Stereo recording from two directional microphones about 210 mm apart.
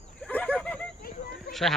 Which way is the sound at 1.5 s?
Centre (ahead or behind).